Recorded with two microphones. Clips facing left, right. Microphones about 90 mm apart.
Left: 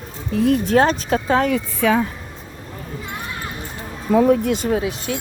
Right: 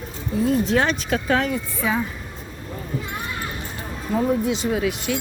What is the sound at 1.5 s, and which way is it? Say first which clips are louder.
Speech: left 6 dB; 75° left (ahead or behind).